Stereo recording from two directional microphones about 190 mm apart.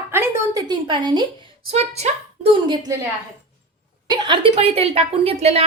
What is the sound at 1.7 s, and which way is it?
Speech, 35° right (ahead or behind).